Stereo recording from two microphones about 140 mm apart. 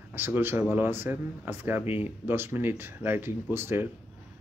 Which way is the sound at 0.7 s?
15° right (ahead or behind).